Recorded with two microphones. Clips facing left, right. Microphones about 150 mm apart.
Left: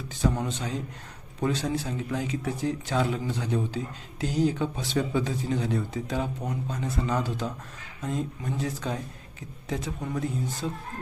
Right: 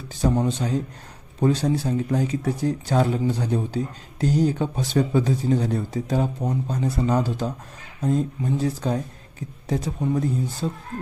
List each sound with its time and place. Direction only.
0.1 s speech: 35° right (ahead or behind)